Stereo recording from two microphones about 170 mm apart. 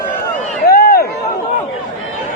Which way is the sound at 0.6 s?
65° left (ahead or behind).